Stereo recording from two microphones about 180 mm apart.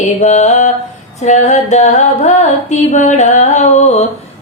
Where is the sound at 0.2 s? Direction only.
40° left (ahead or behind).